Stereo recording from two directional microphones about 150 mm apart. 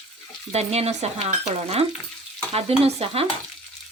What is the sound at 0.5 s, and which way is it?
Stir, 45° right (ahead or behind).